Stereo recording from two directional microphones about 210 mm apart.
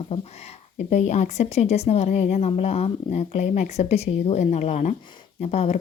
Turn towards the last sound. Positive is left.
turn(degrees=30)  # may be behind; listen again after turning